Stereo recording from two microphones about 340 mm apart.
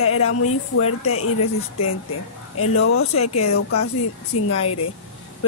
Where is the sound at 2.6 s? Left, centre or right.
Left.